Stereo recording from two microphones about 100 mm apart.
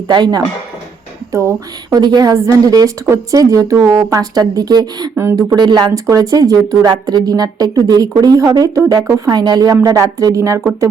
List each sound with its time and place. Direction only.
0.1 s speech: 45° right (ahead or behind)
1.3 s speech: 30° right (ahead or behind)
2.0 s a woman's voice: 45° right (ahead or behind)
5.1 s speech: 30° right (ahead or behind)
5.5 s a woman's voice: 45° right (ahead or behind)